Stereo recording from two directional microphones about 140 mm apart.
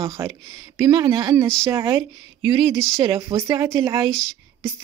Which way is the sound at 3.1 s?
20° right (ahead or behind).